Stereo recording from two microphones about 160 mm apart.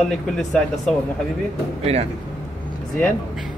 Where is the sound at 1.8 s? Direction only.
40° right (ahead or behind).